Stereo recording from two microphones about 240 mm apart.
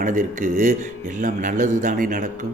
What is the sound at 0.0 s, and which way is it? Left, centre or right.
Speech, right.